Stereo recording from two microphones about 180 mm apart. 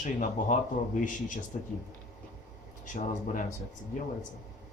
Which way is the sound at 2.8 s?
45° left (ahead or behind).